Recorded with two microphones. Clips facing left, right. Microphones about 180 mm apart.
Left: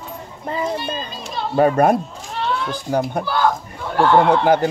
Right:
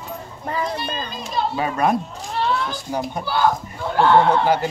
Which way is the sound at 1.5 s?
55° left (ahead or behind).